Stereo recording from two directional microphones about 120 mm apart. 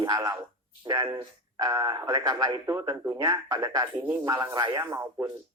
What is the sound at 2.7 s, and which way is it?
Speech, 20° right (ahead or behind).